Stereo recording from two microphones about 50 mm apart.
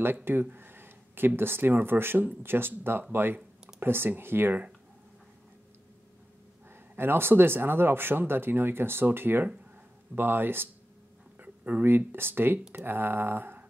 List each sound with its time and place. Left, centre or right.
0.0 s speech: right
7.0 s speech: right
11.4 s speech: right